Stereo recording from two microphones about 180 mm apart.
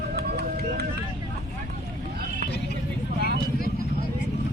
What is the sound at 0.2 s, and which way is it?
Music, 60° right (ahead or behind).